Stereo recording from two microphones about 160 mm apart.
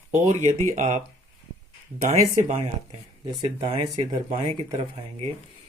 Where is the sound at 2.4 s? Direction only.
45° right (ahead or behind).